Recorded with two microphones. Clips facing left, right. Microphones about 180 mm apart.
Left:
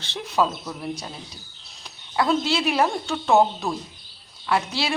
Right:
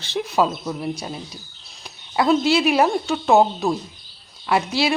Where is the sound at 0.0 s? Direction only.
10° right (ahead or behind).